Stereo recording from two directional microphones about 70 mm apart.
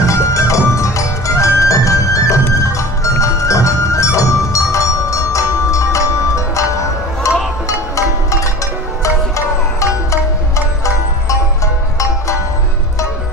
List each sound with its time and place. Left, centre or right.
0.0 s music: left